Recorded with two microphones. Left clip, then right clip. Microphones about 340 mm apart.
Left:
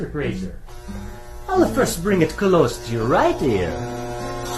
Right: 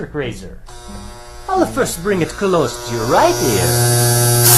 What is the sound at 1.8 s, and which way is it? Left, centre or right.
Speech, centre.